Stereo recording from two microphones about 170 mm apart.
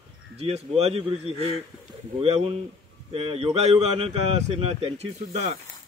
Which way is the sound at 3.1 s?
35° right (ahead or behind).